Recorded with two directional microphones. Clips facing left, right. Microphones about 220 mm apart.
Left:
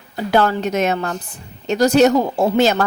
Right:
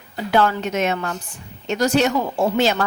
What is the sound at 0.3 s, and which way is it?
A woman's voice, 40° left (ahead or behind).